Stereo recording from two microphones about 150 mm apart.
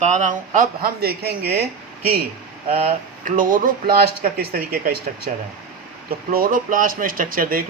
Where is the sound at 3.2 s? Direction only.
65° right (ahead or behind).